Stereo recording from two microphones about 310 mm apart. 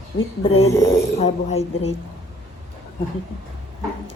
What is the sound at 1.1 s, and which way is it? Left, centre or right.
Speech, centre.